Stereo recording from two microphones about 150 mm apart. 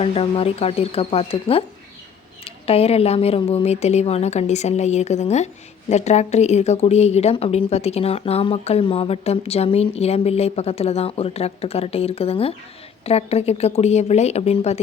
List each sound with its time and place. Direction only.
0.0 s speech: 40° left (ahead or behind)